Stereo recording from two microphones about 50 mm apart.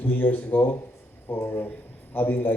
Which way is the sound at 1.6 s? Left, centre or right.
Left.